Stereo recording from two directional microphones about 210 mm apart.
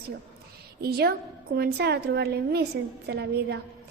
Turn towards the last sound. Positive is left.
turn(degrees=-55)  # may be behind; listen again after turning